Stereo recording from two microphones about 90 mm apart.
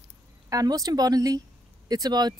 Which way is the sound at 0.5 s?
45° right (ahead or behind).